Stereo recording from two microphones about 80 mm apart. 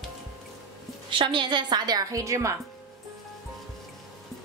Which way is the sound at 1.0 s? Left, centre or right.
Right.